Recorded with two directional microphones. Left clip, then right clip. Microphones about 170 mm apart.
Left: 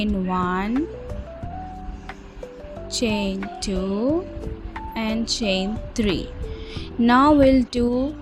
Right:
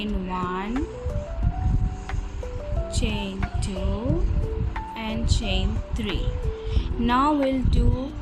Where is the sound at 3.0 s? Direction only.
35° left (ahead or behind).